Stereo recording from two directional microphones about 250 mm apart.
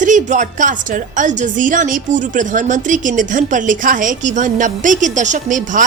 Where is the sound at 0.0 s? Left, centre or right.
Right.